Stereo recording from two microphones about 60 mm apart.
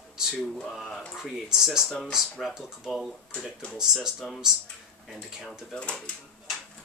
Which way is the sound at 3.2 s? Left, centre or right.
Centre.